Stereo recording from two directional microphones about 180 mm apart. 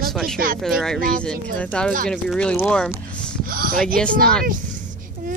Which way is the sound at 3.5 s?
55° right (ahead or behind).